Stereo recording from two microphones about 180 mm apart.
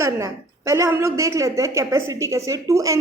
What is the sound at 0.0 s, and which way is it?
A woman's voice, 15° right (ahead or behind).